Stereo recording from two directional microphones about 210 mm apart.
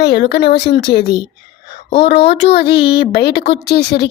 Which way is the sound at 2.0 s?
55° left (ahead or behind).